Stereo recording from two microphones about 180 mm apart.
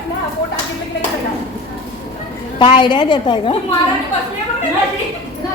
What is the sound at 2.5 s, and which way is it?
A woman's voice, 25° left (ahead or behind).